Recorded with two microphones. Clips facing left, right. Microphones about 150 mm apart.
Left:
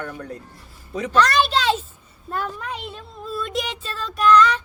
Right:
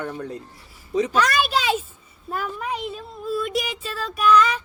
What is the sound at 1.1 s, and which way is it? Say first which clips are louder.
Speech: left 7 dB; 10° right (ahead or behind).